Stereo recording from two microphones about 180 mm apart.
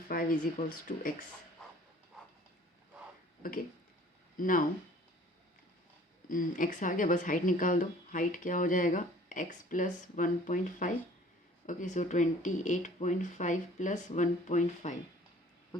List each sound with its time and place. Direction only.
0.1 s speech: 50° left (ahead or behind)
3.4 s speech: 55° left (ahead or behind)
6.2 s speech: 50° left (ahead or behind)